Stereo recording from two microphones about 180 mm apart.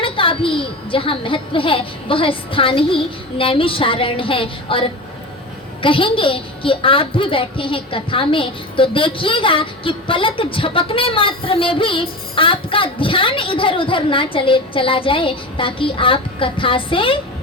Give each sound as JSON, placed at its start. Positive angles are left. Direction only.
{"t": 0.0, "sound": "a woman's voice", "side_deg": 30}